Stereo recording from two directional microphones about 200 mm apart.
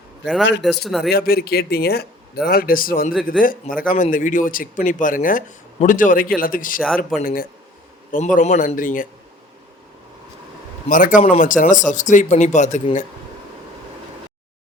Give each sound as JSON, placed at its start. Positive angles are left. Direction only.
{"t": 0.2, "sound": "a man's voice", "side_deg": 60}
{"t": 0.9, "sound": "speech", "side_deg": 0}
{"t": 1.1, "sound": "speech", "side_deg": 50}
{"t": 6.8, "sound": "speech", "side_deg": 0}
{"t": 7.2, "sound": "speech", "side_deg": 45}
{"t": 10.8, "sound": "speech", "side_deg": 40}